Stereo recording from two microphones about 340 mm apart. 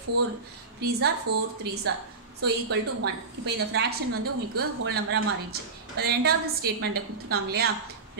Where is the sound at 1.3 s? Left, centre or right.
Right.